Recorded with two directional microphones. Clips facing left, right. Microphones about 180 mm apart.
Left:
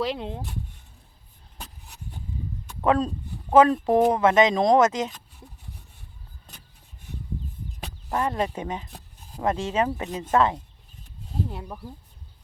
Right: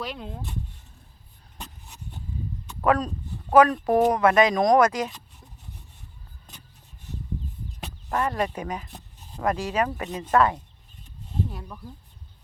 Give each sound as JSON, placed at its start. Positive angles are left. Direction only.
{"t": 0.0, "sound": "speech", "side_deg": 25}
{"t": 2.8, "sound": "speech", "side_deg": 25}
{"t": 8.1, "sound": "speech", "side_deg": 20}
{"t": 8.9, "sound": "rub", "side_deg": 0}
{"t": 9.4, "sound": "speech", "side_deg": 25}